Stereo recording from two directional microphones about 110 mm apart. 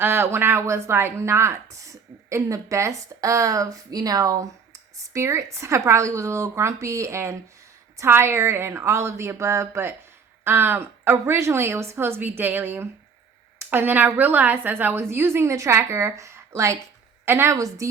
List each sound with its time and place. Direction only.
0.0 s a woman's voice: 25° right (ahead or behind)